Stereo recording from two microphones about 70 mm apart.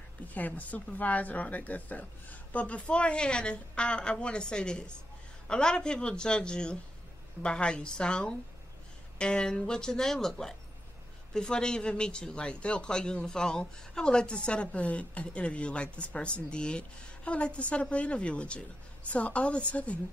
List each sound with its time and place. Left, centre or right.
0.3 s a woman's voice: left